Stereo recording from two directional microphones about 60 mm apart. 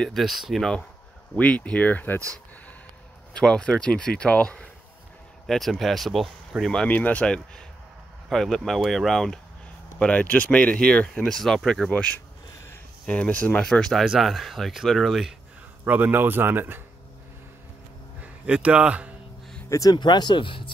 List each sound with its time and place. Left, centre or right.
0.1 s speech: centre
1.3 s speech: left
3.3 s speech: centre
5.5 s speech: centre
6.5 s speech: right
6.9 s speech: left
7.2 s speech: centre
9.9 s speech: left
11.9 s speech: left
13.7 s speech: centre
15.8 s speech: right
18.2 s speech: right
19.7 s speech: left